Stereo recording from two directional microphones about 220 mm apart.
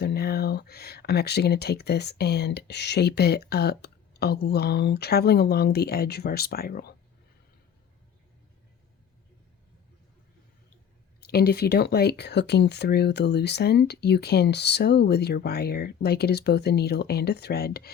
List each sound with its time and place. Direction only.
0.0 s speech: 45° left (ahead or behind)
11.2 s speech: 45° left (ahead or behind)